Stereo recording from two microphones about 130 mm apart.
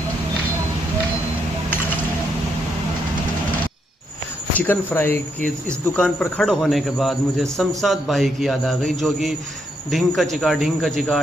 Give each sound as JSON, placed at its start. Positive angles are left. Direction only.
{"t": 4.6, "sound": "a man's voice", "side_deg": 15}